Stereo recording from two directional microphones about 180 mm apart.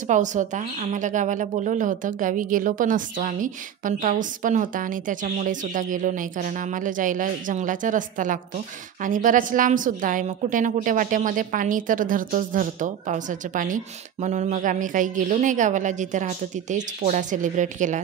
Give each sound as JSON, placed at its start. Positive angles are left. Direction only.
{"t": 0.0, "sound": "speech", "side_deg": -45}